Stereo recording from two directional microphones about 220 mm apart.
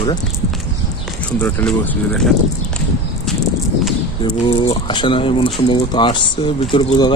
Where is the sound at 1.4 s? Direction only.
10° left (ahead or behind).